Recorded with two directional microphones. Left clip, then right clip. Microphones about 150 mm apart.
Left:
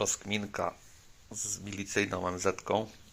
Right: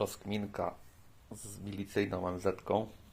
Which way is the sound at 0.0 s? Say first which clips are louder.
Left 4 dB; 5° right (ahead or behind).